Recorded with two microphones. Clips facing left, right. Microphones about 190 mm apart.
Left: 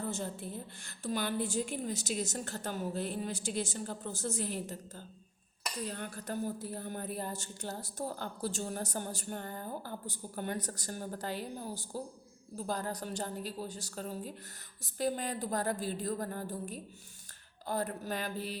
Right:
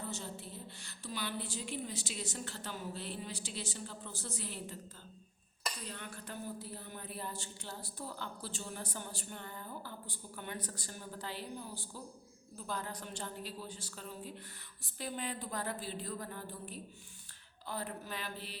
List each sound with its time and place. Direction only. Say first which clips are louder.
0.0 s a woman's voice: left 6 dB; 50° left (ahead or behind)
5.9 s a woman's voice: left 7 dB; 40° left (ahead or behind)